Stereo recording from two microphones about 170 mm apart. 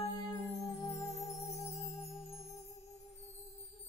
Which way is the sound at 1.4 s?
40° left (ahead or behind).